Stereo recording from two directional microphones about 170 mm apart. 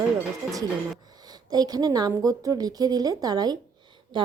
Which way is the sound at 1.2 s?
25° right (ahead or behind).